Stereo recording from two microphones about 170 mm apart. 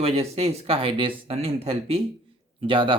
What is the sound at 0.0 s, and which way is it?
Speech, 40° right (ahead or behind).